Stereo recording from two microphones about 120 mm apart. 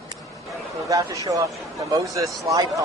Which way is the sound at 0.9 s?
25° right (ahead or behind).